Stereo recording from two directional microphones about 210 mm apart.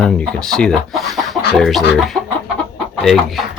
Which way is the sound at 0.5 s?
Centre (ahead or behind).